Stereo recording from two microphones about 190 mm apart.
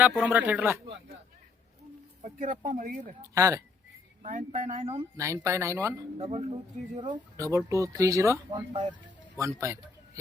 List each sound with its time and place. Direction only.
0.0 s speech: 10° right (ahead or behind)
2.2 s speech: 45° right (ahead or behind)
3.3 s speech: 15° right (ahead or behind)
4.2 s speech: 40° right (ahead or behind)
5.1 s speech: 15° right (ahead or behind)
6.1 s speech: 30° right (ahead or behind)
7.3 s speech: 15° right (ahead or behind)